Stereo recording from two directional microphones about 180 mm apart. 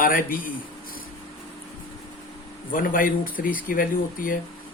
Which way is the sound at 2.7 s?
50° left (ahead or behind).